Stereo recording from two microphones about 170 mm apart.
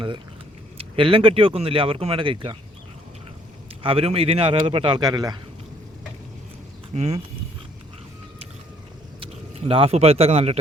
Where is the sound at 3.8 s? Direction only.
35° right (ahead or behind).